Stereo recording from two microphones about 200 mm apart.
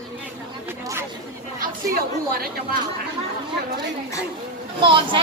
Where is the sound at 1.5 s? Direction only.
45° right (ahead or behind).